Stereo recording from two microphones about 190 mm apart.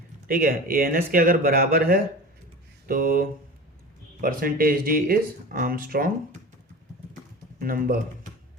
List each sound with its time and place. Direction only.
0.3 s speech: 50° right (ahead or behind)
7.6 s speech: 50° right (ahead or behind)